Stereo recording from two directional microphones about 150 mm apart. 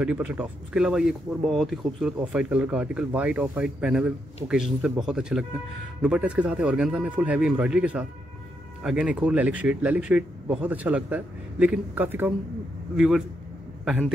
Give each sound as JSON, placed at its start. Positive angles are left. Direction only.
{"t": 0.0, "sound": "speech", "side_deg": -10}